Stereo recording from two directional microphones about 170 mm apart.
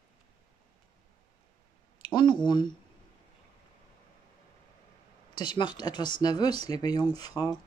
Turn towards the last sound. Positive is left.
turn(degrees=25)  # may be behind; listen again after turning